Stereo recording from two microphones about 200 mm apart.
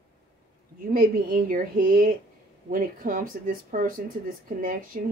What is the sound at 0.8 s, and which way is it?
Speech, 45° right (ahead or behind).